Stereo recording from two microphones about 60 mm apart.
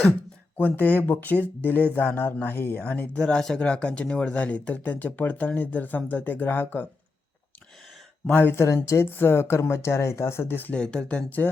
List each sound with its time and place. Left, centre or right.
0.5 s speech: left
3.2 s speech: centre; by 6.8 s left
8.4 s speech: left
8.6 s speech: left
9.0 s speech: left
10.7 s speech: centre